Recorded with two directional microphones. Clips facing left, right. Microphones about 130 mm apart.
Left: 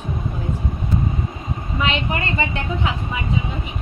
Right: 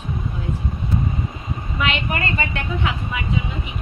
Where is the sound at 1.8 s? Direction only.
25° left (ahead or behind).